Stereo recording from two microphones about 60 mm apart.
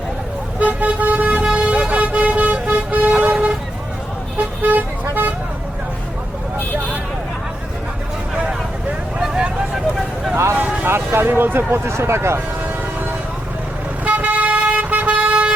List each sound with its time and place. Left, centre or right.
0.6 s vehicle: right
4.7 s vehicle: right
8.4 s vehicle: centre
10.3 s vehicle: right
14.0 s vehicle: right